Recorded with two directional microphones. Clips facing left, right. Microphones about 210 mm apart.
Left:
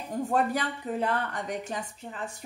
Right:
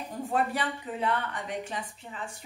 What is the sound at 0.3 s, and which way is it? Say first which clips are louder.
Speech: left 1 dB; 40° left (ahead or behind).